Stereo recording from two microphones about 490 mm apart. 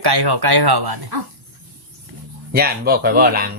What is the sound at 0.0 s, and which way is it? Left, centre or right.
Speech, right.